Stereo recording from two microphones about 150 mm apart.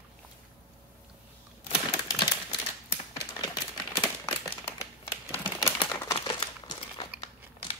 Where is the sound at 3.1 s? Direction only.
30° left (ahead or behind).